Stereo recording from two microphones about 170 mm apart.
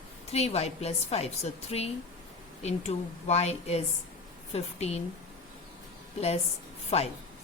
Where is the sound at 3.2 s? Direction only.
40° left (ahead or behind).